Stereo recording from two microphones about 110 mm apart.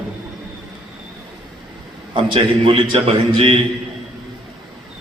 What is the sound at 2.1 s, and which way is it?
A man's voice, 45° right (ahead or behind).